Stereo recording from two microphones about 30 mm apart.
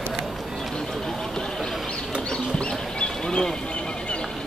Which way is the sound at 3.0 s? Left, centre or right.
Left.